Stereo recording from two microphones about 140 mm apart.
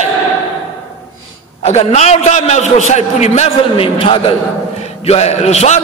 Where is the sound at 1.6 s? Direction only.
50° left (ahead or behind).